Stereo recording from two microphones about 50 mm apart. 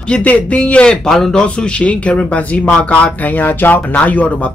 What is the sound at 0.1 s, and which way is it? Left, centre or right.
Speech, left.